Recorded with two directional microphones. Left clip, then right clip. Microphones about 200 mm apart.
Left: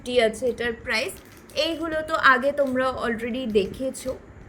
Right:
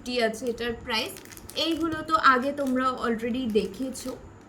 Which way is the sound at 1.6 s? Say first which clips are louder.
Left 3 dB; 30° left (ahead or behind).